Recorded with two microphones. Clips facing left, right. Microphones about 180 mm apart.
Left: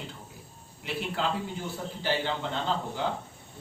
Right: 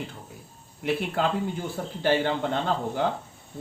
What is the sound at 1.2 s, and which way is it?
Speech, 50° right (ahead or behind).